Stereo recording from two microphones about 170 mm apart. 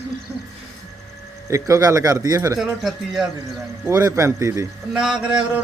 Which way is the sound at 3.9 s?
15° right (ahead or behind).